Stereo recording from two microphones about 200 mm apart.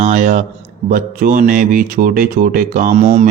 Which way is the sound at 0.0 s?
35° right (ahead or behind).